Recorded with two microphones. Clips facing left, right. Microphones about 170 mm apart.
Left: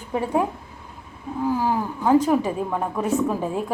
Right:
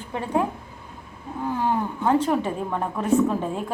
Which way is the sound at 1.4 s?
5° left (ahead or behind).